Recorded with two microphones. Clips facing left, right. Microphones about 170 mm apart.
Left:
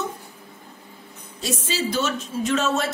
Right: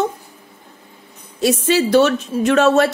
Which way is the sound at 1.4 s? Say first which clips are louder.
Right 11 dB; 65° right (ahead or behind).